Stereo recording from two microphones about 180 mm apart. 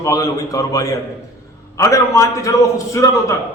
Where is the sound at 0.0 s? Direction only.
20° left (ahead or behind).